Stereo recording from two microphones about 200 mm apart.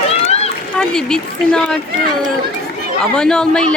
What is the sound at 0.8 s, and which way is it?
Speech, 5° left (ahead or behind).